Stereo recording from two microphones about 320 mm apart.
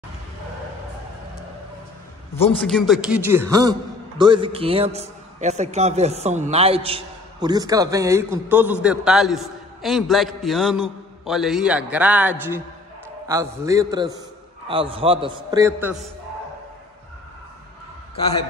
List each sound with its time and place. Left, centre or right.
2.6 s a man's voice: centre